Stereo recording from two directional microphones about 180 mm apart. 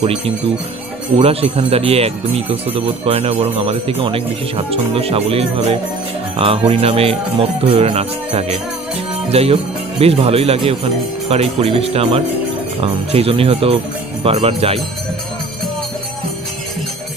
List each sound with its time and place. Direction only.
0.0 s speech: 30° right (ahead or behind)